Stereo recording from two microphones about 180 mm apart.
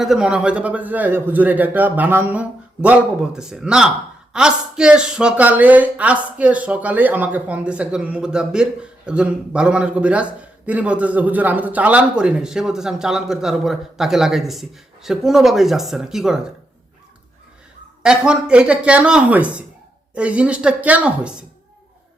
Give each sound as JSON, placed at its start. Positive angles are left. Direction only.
{"t": 0.0, "sound": "a man's voice", "side_deg": -5}
{"t": 18.0, "sound": "a man's voice", "side_deg": -5}